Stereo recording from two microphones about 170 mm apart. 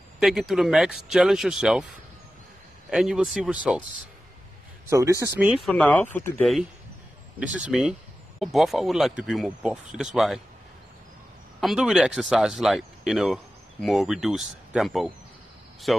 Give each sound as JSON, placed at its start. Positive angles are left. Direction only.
{"t": 0.2, "sound": "speech", "side_deg": 0}
{"t": 2.9, "sound": "speech", "side_deg": -5}
{"t": 4.8, "sound": "speech", "side_deg": -15}
{"t": 5.7, "sound": "speech", "side_deg": 5}
{"t": 7.5, "sound": "speech", "side_deg": -5}
{"t": 11.6, "sound": "speech", "side_deg": -5}